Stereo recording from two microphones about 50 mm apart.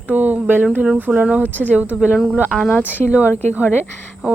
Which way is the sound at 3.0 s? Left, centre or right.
Right.